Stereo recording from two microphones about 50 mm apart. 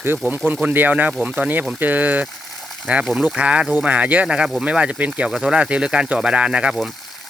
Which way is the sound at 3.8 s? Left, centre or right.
Right.